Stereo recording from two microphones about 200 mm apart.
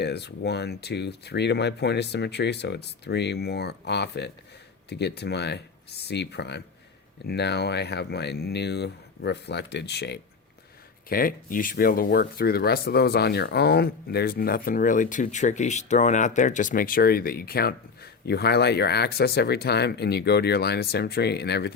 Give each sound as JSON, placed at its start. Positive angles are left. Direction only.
{"t": 0.0, "sound": "speech", "side_deg": 55}
{"t": 11.1, "sound": "speech", "side_deg": 45}